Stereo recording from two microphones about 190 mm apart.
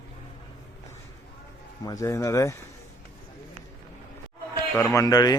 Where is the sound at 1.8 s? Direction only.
15° left (ahead or behind).